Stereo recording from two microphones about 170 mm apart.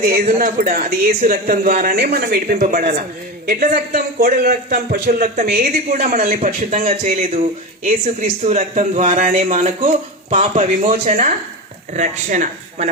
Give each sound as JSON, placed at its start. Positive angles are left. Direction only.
{"t": 0.0, "sound": "a man's voice", "side_deg": -60}